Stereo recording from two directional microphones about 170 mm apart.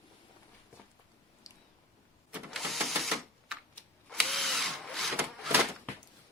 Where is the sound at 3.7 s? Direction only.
Centre (ahead or behind).